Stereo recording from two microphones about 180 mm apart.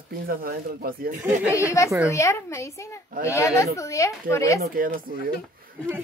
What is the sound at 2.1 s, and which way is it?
A woman's voice, 15° left (ahead or behind).